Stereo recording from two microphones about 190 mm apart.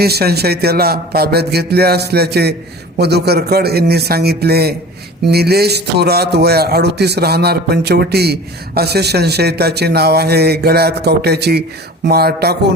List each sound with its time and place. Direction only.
0.0 s a man's voice: 55° right (ahead or behind)